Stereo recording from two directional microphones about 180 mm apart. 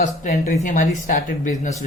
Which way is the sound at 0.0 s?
45° left (ahead or behind).